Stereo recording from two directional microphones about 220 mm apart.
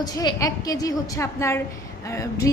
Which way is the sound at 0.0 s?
15° left (ahead or behind).